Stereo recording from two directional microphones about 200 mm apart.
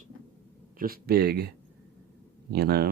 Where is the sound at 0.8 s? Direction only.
50° right (ahead or behind).